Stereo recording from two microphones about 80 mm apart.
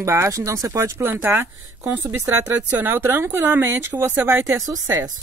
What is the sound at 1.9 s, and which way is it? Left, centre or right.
Speech, right.